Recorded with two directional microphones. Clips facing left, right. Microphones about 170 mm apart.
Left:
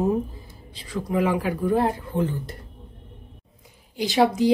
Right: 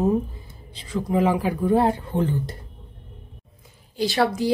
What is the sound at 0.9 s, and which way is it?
Speech, 25° right (ahead or behind).